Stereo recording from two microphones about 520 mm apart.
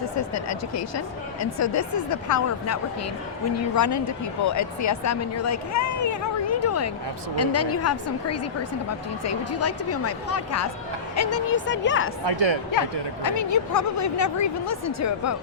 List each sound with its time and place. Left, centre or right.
0.2 s speech: left
3.8 s speech: left
12.2 s speech: right
13.2 s speech: left